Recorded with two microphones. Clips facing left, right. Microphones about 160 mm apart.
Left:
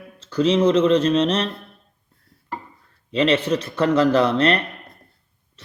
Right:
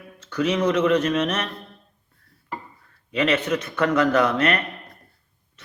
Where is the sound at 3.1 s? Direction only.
30° left (ahead or behind).